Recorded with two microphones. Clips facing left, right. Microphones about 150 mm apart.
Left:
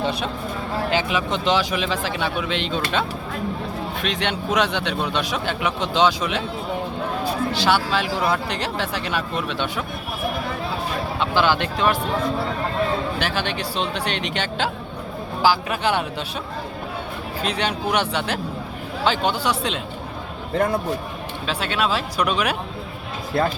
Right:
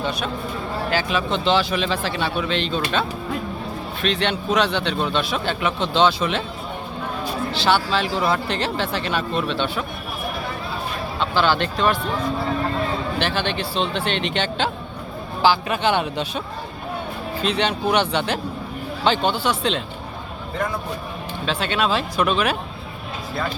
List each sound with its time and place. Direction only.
0.0 s speech: 30° left (ahead or behind)
0.9 s a man's voice: 15° left (ahead or behind)
4.0 s a man's voice: 15° left (ahead or behind)
7.5 s a man's voice: 10° left (ahead or behind)
11.2 s a man's voice: 10° left (ahead or behind)
13.2 s a man's voice: 10° left (ahead or behind)
17.4 s a man's voice: 5° left (ahead or behind)
21.4 s speech: 5° left (ahead or behind)